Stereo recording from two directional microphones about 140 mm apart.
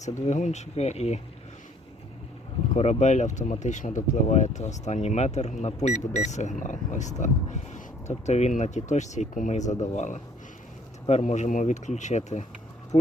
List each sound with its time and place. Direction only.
0.3 s speech: 55° left (ahead or behind)
2.7 s speech: 50° left (ahead or behind)